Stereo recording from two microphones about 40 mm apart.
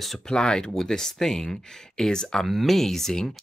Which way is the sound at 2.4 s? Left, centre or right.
Centre.